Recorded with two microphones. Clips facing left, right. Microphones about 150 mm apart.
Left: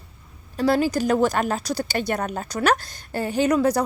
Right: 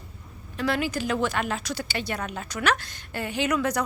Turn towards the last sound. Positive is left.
turn(degrees=35)  # may be behind; listen again after turning